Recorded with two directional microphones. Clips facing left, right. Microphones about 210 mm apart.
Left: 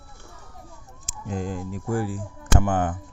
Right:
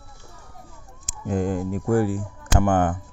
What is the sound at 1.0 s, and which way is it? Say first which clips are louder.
Speech: right 6 dB; 55° right (ahead or behind).